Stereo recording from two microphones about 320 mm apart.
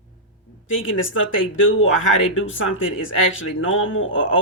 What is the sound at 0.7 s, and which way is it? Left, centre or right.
Speech, left.